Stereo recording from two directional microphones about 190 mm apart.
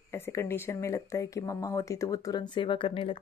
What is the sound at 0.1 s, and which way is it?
Speech, 15° left (ahead or behind).